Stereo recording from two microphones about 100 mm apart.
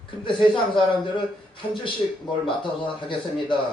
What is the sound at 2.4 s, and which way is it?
A man's voice, 55° left (ahead or behind).